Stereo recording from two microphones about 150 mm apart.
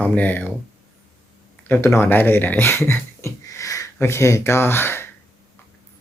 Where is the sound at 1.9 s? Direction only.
10° left (ahead or behind).